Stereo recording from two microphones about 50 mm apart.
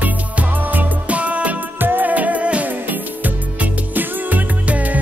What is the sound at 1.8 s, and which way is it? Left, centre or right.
Music, right.